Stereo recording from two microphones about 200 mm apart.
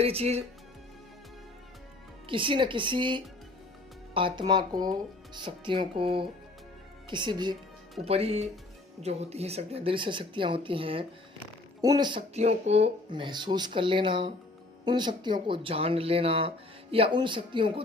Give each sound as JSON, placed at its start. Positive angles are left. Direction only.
{"t": 0.0, "sound": "speech", "side_deg": -30}
{"t": 2.3, "sound": "speech", "side_deg": -25}